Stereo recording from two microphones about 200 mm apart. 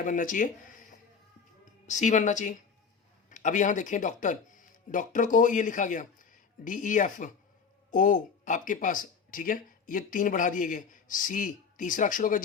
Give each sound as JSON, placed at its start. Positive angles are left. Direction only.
{"t": 0.0, "sound": "speech", "side_deg": 40}